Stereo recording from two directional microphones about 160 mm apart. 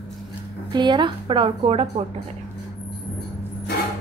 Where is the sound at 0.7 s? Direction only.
30° right (ahead or behind).